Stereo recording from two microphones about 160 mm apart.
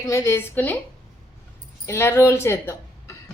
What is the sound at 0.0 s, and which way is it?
Speech, 15° left (ahead or behind).